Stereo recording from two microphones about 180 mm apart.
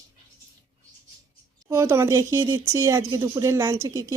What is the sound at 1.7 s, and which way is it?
Speech, 15° right (ahead or behind).